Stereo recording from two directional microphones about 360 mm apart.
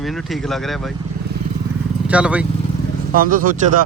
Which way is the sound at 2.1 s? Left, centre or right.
Centre.